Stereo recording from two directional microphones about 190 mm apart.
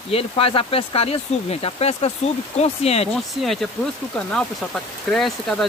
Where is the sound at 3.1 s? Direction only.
Centre (ahead or behind).